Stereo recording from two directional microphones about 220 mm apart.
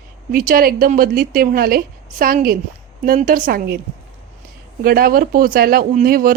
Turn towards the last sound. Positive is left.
turn(degrees=-40)  # may be behind; listen again after turning